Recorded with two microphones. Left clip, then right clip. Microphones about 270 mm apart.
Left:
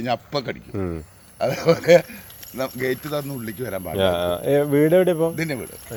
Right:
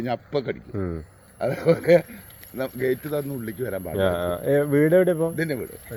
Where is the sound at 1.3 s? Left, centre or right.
Left.